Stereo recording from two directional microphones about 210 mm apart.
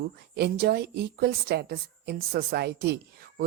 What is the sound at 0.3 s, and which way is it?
A woman's voice, 50° right (ahead or behind).